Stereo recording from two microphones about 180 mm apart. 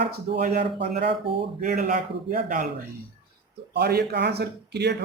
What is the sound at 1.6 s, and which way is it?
A man's voice, 50° right (ahead or behind).